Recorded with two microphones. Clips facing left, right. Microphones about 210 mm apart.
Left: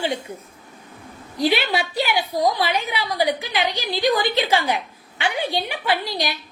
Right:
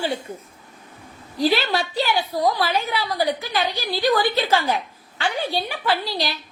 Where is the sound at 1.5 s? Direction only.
10° left (ahead or behind).